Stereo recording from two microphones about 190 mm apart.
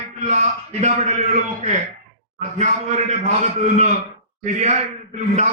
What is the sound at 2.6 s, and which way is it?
Speech, 40° right (ahead or behind).